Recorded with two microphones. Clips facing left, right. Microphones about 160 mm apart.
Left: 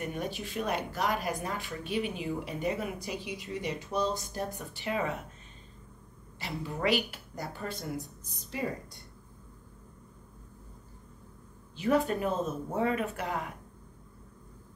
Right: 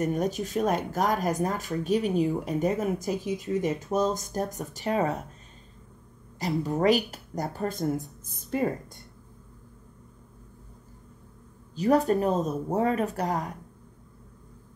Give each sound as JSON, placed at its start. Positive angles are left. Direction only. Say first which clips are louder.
{"t": 0.0, "sound": "speech", "louder": "right 8 dB", "side_deg": -40}
{"t": 6.4, "sound": "speech", "louder": "right 8 dB", "side_deg": -40}
{"t": 11.7, "sound": "speech", "louder": "right 5 dB", "side_deg": -40}